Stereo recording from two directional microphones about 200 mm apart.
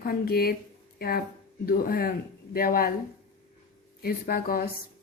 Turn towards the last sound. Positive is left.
turn(degrees=50)  # may be behind; listen again after turning